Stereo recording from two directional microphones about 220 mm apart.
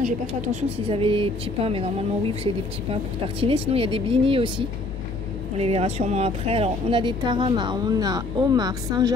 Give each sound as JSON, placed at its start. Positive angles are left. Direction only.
{"t": 0.0, "sound": "a woman's voice", "side_deg": -30}